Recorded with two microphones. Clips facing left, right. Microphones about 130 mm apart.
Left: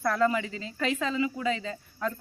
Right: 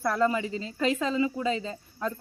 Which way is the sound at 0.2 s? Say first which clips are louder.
Even; 25° right (ahead or behind).